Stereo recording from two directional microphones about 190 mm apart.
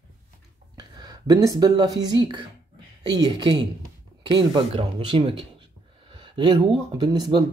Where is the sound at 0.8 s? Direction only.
20° right (ahead or behind).